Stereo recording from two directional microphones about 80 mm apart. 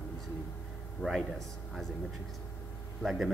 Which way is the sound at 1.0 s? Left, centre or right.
Left.